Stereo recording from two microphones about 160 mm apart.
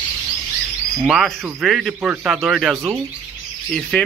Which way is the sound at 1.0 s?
Centre (ahead or behind).